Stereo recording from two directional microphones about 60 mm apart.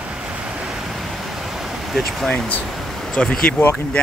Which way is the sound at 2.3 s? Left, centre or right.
Left.